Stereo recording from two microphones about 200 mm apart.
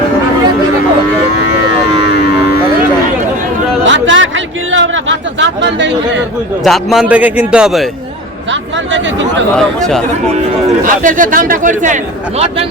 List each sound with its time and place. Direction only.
3.8 s a sound: 65° right (ahead or behind)
6.7 s a man's voice: 5° right (ahead or behind)
9.6 s a man's voice: centre (ahead or behind)
10.8 s speech: 40° right (ahead or behind)